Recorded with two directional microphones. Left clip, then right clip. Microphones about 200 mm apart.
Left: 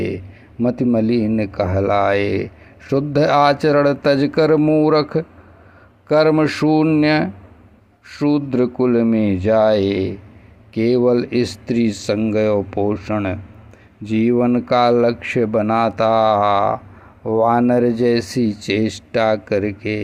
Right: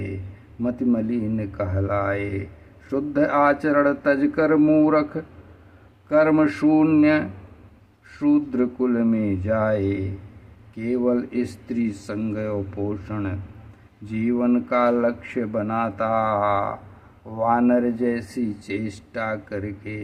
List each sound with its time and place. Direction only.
0.6 s speech: 30° left (ahead or behind)